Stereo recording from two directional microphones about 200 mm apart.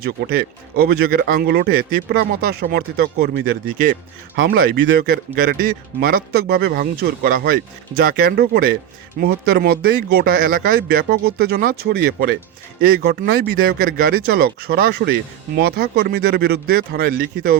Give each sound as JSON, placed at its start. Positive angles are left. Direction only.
{"t": 0.0, "sound": "speech", "side_deg": -50}